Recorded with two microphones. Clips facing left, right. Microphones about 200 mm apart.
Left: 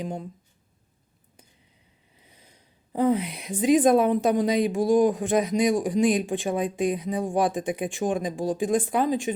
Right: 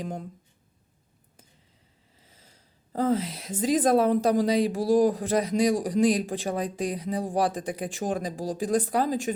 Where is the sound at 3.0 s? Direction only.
15° left (ahead or behind).